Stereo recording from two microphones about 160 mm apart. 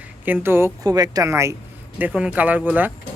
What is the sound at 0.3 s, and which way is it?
A woman's voice, 15° right (ahead or behind).